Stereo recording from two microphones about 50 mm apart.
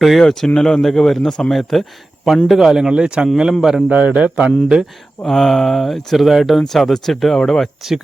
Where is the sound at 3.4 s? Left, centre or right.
Centre.